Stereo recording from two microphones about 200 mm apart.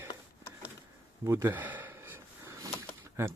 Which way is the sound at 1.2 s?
15° right (ahead or behind).